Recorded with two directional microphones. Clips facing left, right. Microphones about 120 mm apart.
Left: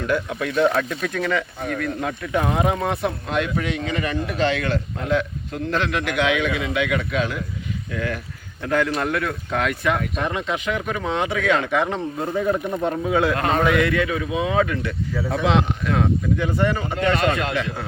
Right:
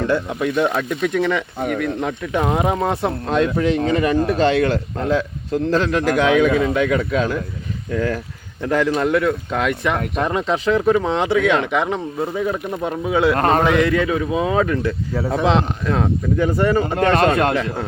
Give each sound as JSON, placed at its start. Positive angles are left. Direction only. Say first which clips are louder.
{"t": 0.1, "sound": "speech", "louder": "right 3 dB", "side_deg": -20}
{"t": 13.3, "sound": "speech", "louder": "right 4 dB", "side_deg": -40}
{"t": 13.7, "sound": "speech", "louder": "right 3 dB", "side_deg": -30}
{"t": 16.8, "sound": "speech", "louder": "right 5 dB", "side_deg": -45}